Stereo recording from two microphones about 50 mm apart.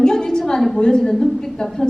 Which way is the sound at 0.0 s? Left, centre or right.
Centre.